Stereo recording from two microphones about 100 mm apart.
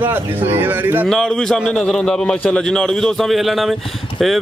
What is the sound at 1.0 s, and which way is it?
Speech, 5° left (ahead or behind).